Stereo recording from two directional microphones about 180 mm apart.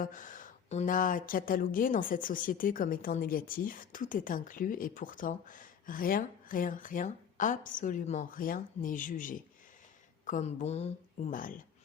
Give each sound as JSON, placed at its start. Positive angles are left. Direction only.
{"t": 0.0, "sound": "a woman's voice", "side_deg": 45}